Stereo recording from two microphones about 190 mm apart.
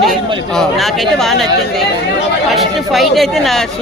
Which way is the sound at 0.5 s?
Centre (ahead or behind).